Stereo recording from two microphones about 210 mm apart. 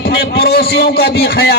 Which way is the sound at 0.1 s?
50° left (ahead or behind).